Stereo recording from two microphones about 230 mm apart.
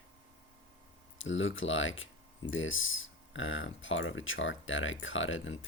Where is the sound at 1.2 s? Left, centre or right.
Left.